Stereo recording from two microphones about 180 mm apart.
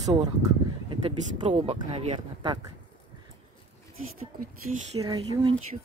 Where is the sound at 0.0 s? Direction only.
20° right (ahead or behind).